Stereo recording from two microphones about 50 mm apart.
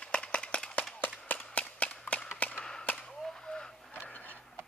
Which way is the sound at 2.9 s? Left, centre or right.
Centre.